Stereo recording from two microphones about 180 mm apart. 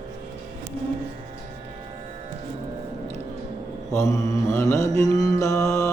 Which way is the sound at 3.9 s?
15° left (ahead or behind).